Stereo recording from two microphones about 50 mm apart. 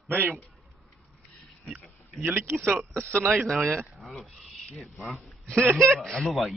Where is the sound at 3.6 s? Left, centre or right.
Right.